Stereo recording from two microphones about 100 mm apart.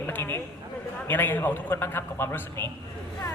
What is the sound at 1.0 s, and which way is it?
A man's voice, 20° left (ahead or behind).